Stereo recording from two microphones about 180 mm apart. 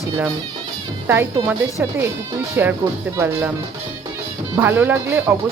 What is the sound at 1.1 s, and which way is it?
Speech, 10° right (ahead or behind).